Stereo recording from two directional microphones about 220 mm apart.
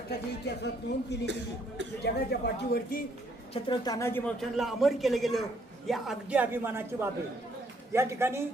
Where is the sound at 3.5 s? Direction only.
20° left (ahead or behind).